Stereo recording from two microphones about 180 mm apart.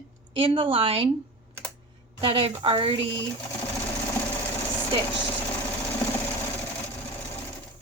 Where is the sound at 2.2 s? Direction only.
30° right (ahead or behind).